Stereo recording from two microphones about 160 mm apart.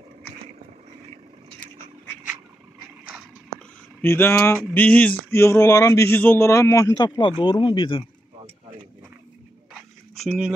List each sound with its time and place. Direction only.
4.0 s a man's voice: 15° left (ahead or behind); by 8.0 s 30° left (ahead or behind)
10.1 s speech: centre (ahead or behind)